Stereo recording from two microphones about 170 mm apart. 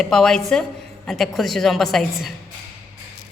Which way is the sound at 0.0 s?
5° left (ahead or behind).